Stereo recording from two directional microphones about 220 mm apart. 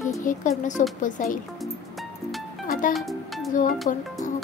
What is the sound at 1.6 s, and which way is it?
Music, centre (ahead or behind).